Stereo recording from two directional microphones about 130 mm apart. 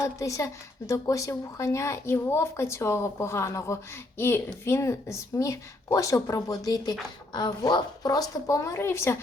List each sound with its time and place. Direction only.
0.0 s a woman's voice: 25° left (ahead or behind)